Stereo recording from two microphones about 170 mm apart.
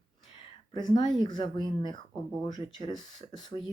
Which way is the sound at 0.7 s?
25° left (ahead or behind).